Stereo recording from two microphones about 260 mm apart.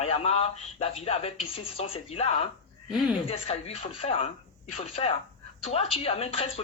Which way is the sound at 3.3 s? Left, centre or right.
Left.